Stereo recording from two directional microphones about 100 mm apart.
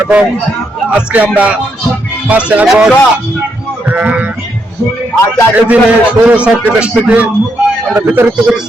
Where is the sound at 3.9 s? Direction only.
15° right (ahead or behind).